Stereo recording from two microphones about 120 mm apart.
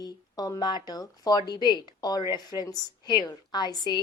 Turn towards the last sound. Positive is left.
turn(degrees=35)  # may be behind; listen again after turning